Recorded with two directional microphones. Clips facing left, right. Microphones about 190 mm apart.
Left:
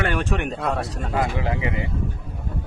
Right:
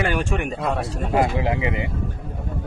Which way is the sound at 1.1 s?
20° right (ahead or behind).